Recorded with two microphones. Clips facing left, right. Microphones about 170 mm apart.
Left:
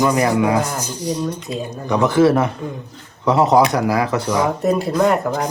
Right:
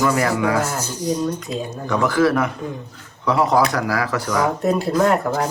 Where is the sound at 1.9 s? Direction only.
20° left (ahead or behind).